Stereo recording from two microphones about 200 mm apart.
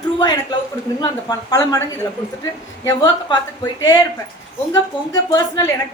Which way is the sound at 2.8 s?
15° left (ahead or behind).